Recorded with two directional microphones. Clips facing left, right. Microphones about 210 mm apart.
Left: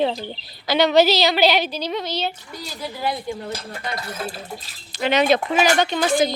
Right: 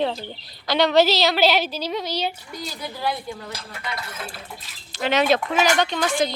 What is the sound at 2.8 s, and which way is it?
Speech, 15° left (ahead or behind).